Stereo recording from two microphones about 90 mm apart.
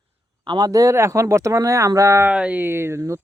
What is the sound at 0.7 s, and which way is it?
Speech, 40° right (ahead or behind).